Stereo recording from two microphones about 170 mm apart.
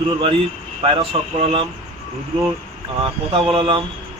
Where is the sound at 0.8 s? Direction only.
35° right (ahead or behind).